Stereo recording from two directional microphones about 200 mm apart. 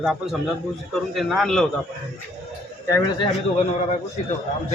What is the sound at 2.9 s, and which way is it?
Speech, 20° left (ahead or behind).